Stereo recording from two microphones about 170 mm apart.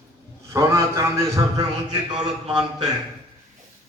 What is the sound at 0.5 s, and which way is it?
A man's voice, 15° right (ahead or behind).